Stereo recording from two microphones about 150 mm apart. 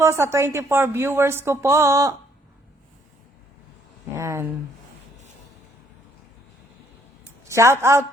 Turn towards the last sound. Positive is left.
turn(degrees=-20)  # may be behind; listen again after turning